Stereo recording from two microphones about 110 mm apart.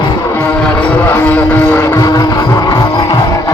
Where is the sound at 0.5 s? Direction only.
5° left (ahead or behind); by 3.5 s 35° left (ahead or behind).